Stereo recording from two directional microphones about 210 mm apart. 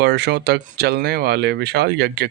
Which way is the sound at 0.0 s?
50° right (ahead or behind).